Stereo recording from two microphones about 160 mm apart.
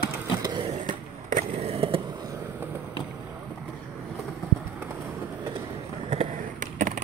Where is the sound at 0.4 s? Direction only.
25° right (ahead or behind).